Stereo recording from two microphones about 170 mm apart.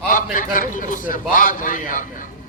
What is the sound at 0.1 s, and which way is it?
A man's voice, 50° left (ahead or behind).